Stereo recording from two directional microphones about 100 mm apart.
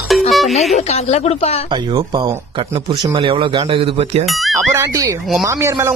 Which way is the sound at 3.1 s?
60° right (ahead or behind).